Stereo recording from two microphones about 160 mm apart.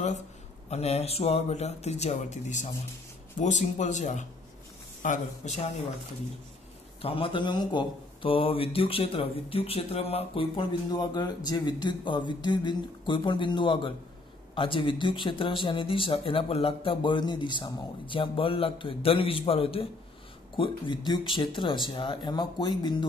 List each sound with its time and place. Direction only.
0.7 s speech: 40° left (ahead or behind)
7.0 s speech: 35° left (ahead or behind)